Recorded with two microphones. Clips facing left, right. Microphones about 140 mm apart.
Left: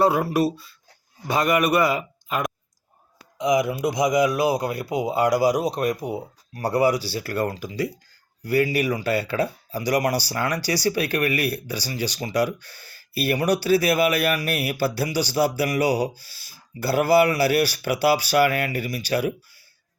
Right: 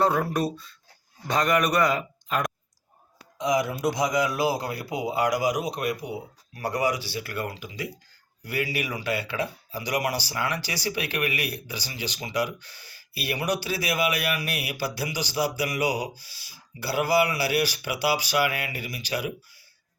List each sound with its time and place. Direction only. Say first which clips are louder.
0.0 s a man's voice: left 4 dB; 10° left (ahead or behind)
3.3 s speech: left 4 dB; 15° left (ahead or behind); by 19.3 s 45° left (ahead or behind)